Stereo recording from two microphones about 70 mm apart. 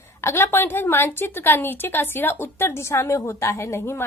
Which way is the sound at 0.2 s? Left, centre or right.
Left.